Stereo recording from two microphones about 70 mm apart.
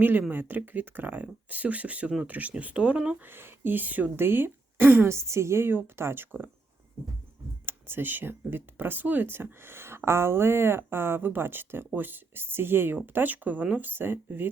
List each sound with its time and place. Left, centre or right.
0.0 s speech: right
3.2 s speech: right
5.1 s speech: right
7.6 s speech: right